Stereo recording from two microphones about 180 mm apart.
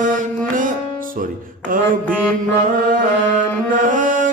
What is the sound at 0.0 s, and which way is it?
Music, 45° right (ahead or behind).